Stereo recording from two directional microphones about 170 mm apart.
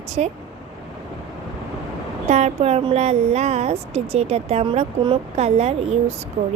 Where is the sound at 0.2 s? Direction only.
40° right (ahead or behind).